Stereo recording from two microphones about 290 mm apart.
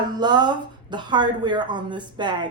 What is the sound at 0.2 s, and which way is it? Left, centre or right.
A woman's voice, centre.